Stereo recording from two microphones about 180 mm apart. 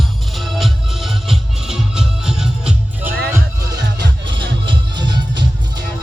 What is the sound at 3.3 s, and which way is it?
Music, 20° right (ahead or behind).